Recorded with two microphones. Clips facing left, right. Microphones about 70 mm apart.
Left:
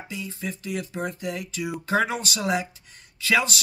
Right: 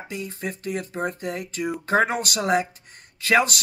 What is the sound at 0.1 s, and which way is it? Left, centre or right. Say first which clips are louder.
Speech: right 2 dB; right.